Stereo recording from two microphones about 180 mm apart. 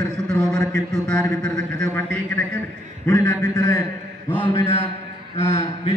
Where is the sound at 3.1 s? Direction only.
15° left (ahead or behind).